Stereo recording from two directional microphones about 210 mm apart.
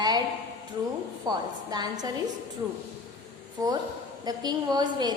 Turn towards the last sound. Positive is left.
turn(degrees=-20)  # may be behind; listen again after turning